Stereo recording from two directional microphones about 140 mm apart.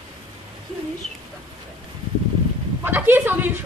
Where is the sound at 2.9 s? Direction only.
15° right (ahead or behind).